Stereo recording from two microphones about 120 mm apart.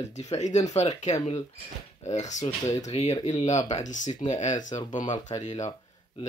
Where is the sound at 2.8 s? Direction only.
65° left (ahead or behind).